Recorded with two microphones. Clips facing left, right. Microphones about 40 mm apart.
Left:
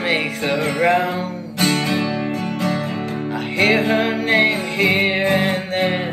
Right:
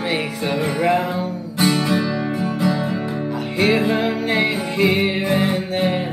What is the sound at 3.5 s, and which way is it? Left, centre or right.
Music, left.